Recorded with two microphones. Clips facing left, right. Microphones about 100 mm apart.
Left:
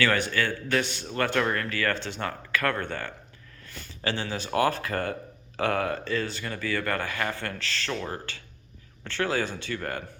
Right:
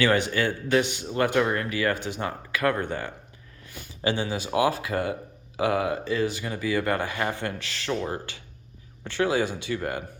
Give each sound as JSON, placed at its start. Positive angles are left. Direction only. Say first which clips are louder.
{"t": 0.0, "sound": "speech", "louder": "right 3 dB", "side_deg": -20}